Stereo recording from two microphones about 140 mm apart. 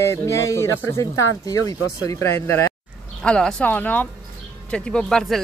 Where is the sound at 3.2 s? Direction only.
5° left (ahead or behind).